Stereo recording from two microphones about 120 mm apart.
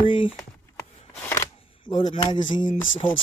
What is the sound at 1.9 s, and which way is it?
Speech, 45° left (ahead or behind).